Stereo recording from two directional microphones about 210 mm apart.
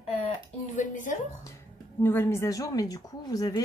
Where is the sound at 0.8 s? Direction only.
35° left (ahead or behind).